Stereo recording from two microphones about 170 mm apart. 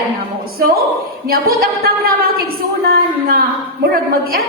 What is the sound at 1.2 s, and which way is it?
A woman's voice, 60° right (ahead or behind).